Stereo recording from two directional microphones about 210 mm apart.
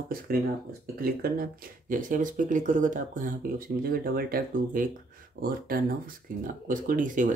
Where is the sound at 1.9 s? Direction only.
40° right (ahead or behind).